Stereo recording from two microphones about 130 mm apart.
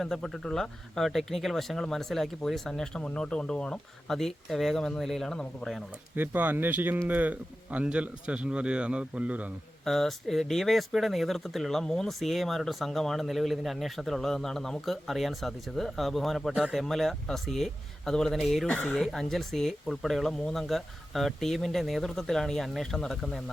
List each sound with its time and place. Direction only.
0.0 s speech: 5° left (ahead or behind)
6.1 s a man's voice: 15° right (ahead or behind)
9.8 s speech: centre (ahead or behind)